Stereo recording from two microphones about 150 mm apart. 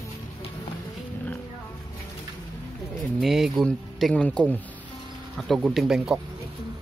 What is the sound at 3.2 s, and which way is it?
Speech, centre (ahead or behind).